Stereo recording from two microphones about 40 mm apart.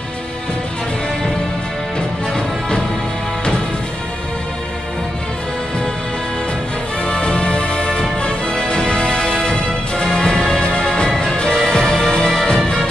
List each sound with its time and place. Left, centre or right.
2.0 s music: centre
7.0 s music: left